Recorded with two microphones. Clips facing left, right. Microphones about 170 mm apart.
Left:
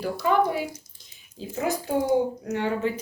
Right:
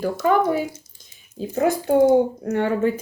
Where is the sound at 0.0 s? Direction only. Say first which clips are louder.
Right 4 dB; 45° right (ahead or behind).